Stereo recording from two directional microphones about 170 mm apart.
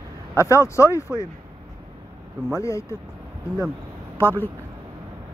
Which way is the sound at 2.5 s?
15° left (ahead or behind).